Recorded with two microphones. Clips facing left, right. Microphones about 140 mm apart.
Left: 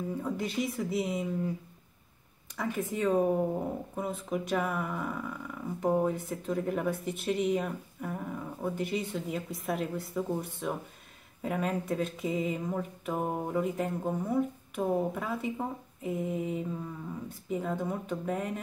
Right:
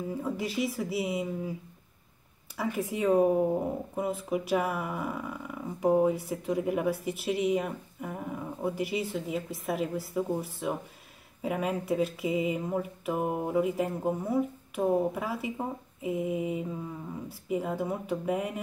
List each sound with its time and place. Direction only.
0.1 s speech: 5° right (ahead or behind)
2.5 s speech: 5° right (ahead or behind)